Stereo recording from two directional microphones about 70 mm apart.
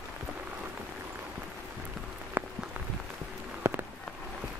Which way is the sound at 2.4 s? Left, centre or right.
Right.